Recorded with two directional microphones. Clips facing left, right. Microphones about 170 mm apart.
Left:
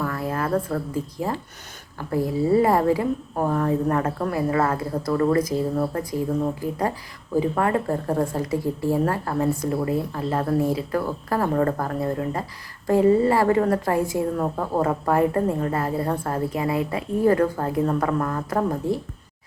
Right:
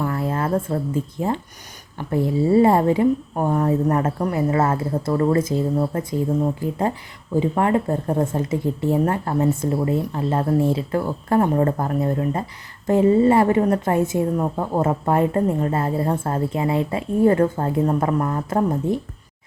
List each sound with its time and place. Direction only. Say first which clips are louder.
0.0 s a sound: right 3 dB; 25° right (ahead or behind)
1.2 s a woman's voice: right 4 dB; 25° right (ahead or behind)
12.9 s a woman's voice: right 2 dB; 20° right (ahead or behind)